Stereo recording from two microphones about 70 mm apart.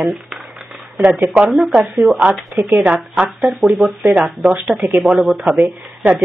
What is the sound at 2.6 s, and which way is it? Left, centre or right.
Speech, right.